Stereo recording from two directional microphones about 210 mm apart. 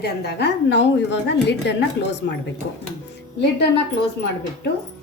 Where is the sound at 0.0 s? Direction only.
50° left (ahead or behind).